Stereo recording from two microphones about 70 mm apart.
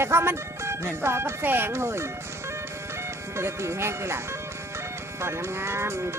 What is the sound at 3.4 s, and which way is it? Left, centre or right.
Speech, right.